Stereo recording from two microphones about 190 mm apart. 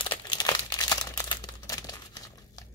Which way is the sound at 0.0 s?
25° left (ahead or behind).